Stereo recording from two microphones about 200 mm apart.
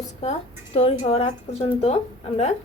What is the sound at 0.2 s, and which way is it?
Speech, 30° left (ahead or behind).